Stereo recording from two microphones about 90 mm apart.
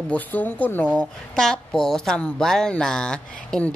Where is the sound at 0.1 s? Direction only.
20° left (ahead or behind).